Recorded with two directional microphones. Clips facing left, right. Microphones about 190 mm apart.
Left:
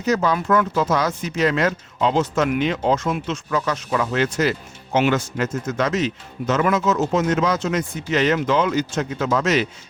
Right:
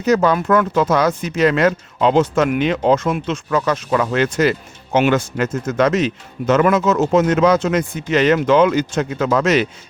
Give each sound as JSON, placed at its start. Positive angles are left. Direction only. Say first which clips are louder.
{"t": 0.0, "sound": "speech", "louder": "right 5 dB", "side_deg": -60}